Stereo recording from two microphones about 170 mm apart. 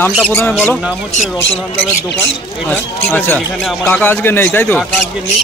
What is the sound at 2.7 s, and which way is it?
Speech, 10° left (ahead or behind).